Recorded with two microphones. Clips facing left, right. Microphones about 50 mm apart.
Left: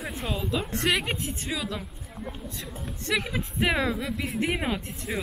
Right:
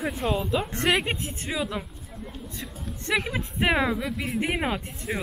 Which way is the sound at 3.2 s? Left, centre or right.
Centre.